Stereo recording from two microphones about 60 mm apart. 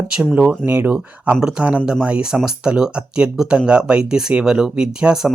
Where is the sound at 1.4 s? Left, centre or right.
Centre.